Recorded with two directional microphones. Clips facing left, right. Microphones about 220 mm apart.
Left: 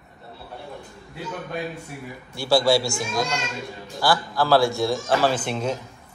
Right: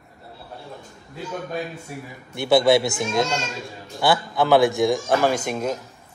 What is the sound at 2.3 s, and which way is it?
A man's voice, 20° right (ahead or behind).